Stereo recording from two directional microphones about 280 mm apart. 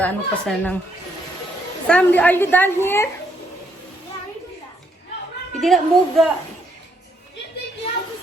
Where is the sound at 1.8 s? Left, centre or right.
Centre.